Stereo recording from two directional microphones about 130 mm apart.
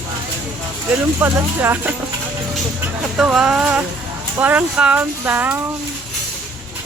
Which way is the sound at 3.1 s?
5° right (ahead or behind).